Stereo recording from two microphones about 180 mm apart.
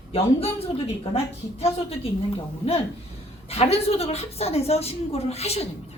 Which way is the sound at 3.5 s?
35° left (ahead or behind).